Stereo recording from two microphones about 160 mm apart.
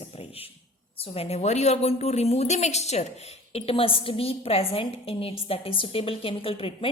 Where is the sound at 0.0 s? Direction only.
35° left (ahead or behind).